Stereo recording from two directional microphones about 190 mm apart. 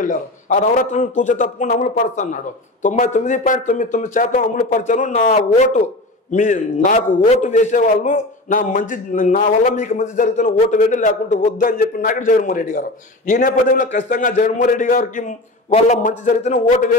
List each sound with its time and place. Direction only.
0.0 s a man's voice: 45° left (ahead or behind)